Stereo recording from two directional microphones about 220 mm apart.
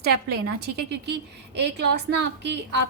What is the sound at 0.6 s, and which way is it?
A woman's voice, 50° right (ahead or behind).